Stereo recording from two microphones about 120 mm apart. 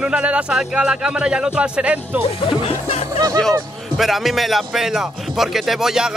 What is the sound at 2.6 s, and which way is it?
Speech, 60° left (ahead or behind).